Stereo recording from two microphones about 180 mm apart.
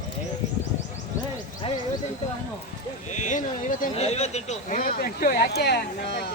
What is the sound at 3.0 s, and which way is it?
A man's voice, 40° left (ahead or behind).